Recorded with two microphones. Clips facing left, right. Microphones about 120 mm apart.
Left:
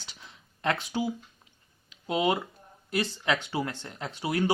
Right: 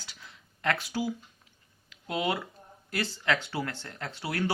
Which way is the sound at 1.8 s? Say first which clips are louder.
Left 4 dB; 20° left (ahead or behind).